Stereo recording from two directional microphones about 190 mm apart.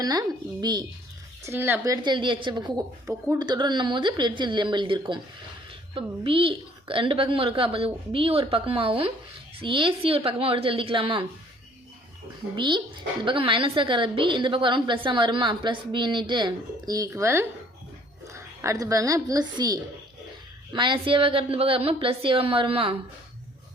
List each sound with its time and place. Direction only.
0.0 s a woman's voice: 20° right (ahead or behind)
1.5 s a woman's voice: 10° right (ahead or behind)
12.5 s a woman's voice: 25° right (ahead or behind)